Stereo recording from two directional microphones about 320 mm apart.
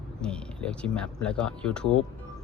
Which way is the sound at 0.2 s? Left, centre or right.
Centre.